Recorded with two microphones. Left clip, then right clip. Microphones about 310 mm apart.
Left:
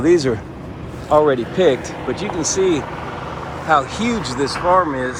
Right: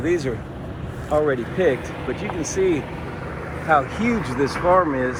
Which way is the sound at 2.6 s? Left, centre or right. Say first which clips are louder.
Left 2 dB; centre.